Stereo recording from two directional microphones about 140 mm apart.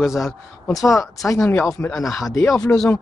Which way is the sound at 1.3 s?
10° left (ahead or behind).